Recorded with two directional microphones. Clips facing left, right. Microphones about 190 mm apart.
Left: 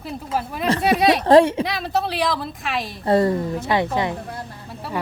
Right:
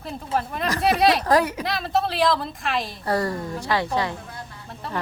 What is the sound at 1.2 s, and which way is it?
Speech, 30° left (ahead or behind).